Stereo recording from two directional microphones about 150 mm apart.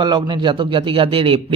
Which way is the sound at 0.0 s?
30° right (ahead or behind).